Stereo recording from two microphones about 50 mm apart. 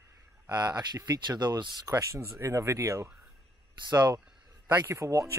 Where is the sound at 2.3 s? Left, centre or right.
Right.